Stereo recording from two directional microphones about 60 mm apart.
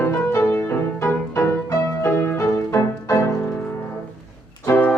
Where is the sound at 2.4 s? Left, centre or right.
Left.